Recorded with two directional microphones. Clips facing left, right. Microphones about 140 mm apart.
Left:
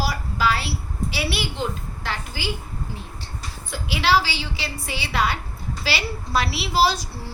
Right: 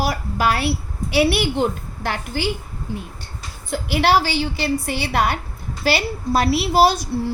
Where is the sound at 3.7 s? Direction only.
55° right (ahead or behind).